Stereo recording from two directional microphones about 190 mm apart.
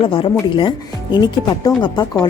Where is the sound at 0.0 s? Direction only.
30° left (ahead or behind).